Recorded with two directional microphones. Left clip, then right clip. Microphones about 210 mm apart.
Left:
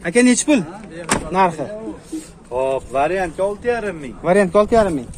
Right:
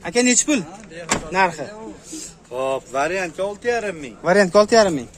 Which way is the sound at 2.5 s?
65° right (ahead or behind).